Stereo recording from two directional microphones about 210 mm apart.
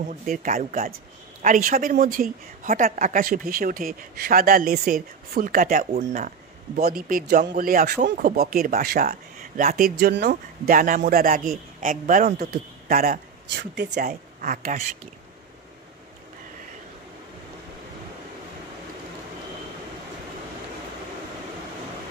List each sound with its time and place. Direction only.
0.3 s a woman's voice: 45° right (ahead or behind)
10.2 s a woman's voice: 40° right (ahead or behind)